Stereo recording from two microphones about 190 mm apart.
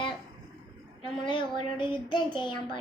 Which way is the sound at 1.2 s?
25° left (ahead or behind).